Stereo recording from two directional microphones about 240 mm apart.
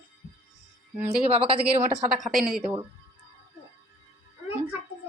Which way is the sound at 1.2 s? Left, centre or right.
Right.